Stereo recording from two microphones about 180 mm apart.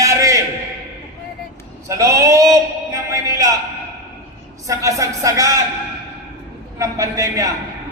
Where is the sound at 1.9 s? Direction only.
15° right (ahead or behind).